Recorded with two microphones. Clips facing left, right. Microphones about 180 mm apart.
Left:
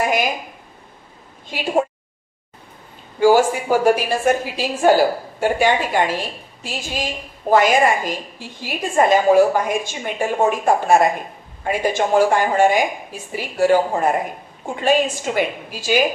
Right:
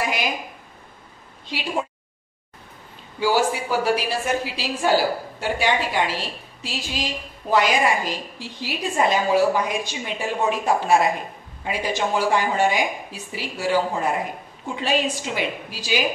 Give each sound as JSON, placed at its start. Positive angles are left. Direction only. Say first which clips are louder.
{"t": 0.0, "sound": "a woman's voice", "louder": "left 6 dB", "side_deg": 50}
{"t": 1.5, "sound": "a woman's voice", "louder": "left 7 dB", "side_deg": 50}
{"t": 3.2, "sound": "a woman's voice", "louder": "left 7 dB", "side_deg": 50}